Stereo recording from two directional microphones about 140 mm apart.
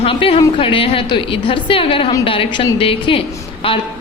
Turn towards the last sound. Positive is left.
turn(degrees=40)  # may be behind; listen again after turning